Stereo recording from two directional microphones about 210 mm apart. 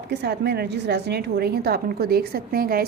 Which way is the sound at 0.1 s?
55° right (ahead or behind).